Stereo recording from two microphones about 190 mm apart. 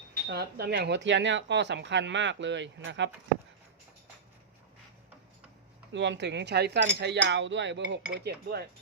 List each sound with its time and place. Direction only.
0.3 s speech: 55° right (ahead or behind)
5.9 s speech: 70° right (ahead or behind)
8.2 s chink: 55° right (ahead or behind)